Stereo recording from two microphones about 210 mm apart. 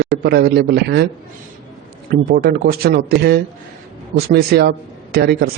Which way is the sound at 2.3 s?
45° right (ahead or behind).